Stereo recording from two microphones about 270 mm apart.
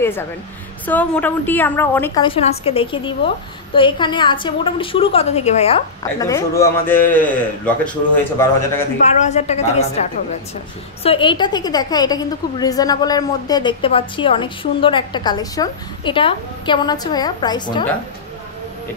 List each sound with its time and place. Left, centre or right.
0.8 s a woman's voice: centre; by 5.8 s left
6.1 s a woman's voice: centre
9.0 s a woman's voice: left